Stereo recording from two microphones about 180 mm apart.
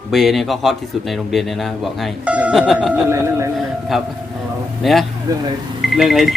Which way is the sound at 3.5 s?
Centre (ahead or behind).